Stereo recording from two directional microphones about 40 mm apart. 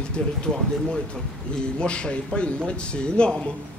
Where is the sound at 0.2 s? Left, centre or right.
Left.